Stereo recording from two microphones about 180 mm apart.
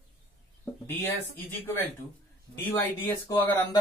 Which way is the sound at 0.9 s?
10° left (ahead or behind).